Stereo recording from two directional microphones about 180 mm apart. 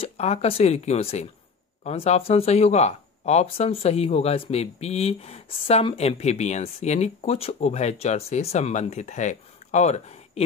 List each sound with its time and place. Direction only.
0.0 s speech: 35° left (ahead or behind)